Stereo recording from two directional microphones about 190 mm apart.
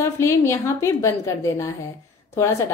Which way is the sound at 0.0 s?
15° left (ahead or behind).